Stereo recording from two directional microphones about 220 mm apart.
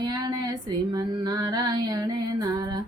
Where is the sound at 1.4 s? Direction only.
15° right (ahead or behind).